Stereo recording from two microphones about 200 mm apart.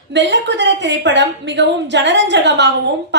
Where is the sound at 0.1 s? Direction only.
60° right (ahead or behind).